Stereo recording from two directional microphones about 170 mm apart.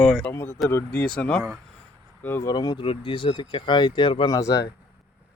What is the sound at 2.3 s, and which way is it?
Speech, 25° left (ahead or behind).